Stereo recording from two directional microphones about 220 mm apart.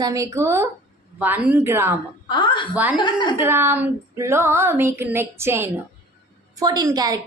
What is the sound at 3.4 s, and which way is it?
A woman's voice, 10° right (ahead or behind).